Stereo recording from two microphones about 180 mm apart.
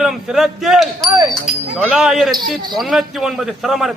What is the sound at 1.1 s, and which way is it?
Speech, 20° right (ahead or behind).